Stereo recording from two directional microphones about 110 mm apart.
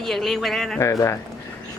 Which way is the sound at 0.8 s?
25° left (ahead or behind).